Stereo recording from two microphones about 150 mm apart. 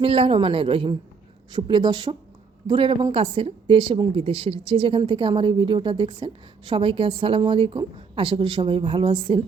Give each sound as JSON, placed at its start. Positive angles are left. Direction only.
{"t": 0.0, "sound": "a woman's voice", "side_deg": -40}